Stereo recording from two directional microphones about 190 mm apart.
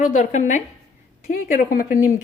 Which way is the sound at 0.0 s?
40° left (ahead or behind).